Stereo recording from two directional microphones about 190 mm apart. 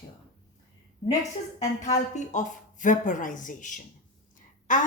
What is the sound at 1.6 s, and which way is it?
A woman's voice, 40° left (ahead or behind).